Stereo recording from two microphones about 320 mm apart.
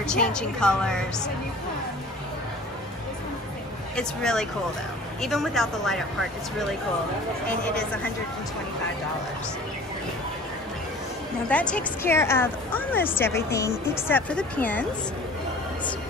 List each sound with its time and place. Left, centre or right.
0.0 s a woman's voice: centre
3.9 s a woman's voice: centre
11.4 s speech: centre